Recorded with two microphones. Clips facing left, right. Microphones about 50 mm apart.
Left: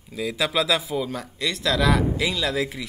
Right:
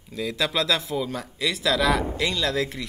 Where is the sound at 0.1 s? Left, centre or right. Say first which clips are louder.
Left 1 dB; centre.